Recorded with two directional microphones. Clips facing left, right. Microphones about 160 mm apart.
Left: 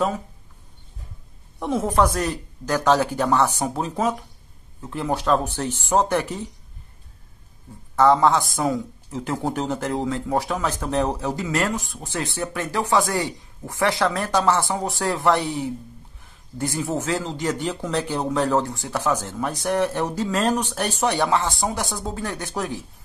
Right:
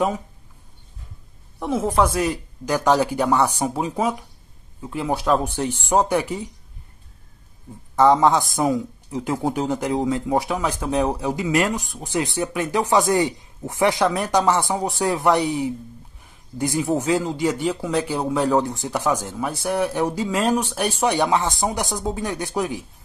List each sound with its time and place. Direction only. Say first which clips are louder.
1.6 s speech: even; centre (ahead or behind)
7.9 s speech: right 1 dB; 15° right (ahead or behind)